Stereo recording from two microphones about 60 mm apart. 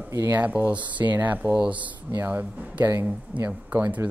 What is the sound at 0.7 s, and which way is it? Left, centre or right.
Speech, right.